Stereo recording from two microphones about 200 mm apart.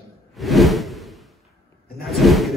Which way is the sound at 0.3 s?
Centre (ahead or behind).